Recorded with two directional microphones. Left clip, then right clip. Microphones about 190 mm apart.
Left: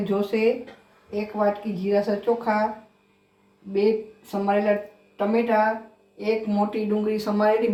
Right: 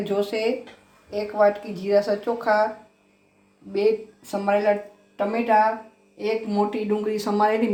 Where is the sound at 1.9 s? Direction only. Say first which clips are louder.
Right 2 dB; 55° right (ahead or behind).